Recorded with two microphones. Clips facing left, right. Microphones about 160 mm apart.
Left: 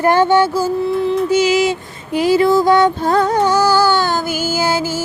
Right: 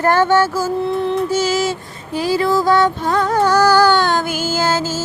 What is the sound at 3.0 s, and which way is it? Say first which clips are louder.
Music: left 3 dB; 35° left (ahead or behind).